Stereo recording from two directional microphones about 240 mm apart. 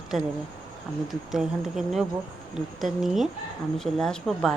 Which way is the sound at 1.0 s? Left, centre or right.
Centre.